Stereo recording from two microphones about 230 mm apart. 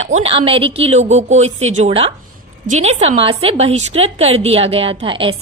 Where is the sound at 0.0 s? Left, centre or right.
Right.